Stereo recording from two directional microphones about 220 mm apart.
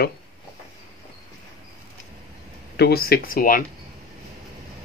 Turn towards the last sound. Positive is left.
turn(degrees=40)  # may be behind; listen again after turning